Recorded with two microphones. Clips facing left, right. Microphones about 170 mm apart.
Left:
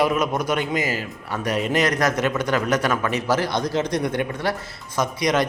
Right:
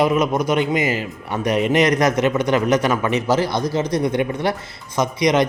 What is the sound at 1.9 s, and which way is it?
A man's voice, 15° right (ahead or behind).